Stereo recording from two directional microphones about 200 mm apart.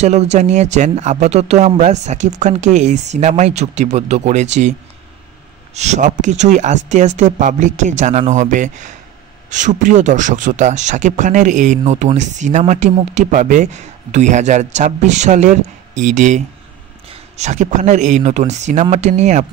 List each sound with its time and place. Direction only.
0.0 s speech: 35° right (ahead or behind)
5.8 s speech: 35° right (ahead or behind)